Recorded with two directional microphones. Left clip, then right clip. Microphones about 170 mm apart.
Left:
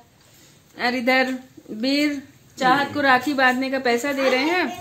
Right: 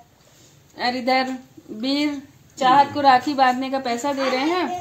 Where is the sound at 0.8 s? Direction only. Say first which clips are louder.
Left 1 dB; 15° left (ahead or behind).